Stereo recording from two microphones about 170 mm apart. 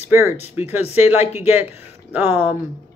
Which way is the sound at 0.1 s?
15° right (ahead or behind).